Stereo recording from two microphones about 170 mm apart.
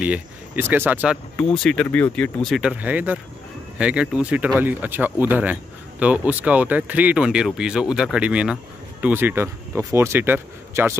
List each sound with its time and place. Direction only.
0.0 s speech: 10° right (ahead or behind)
1.3 s speech: 5° left (ahead or behind); by 11.0 s 15° right (ahead or behind)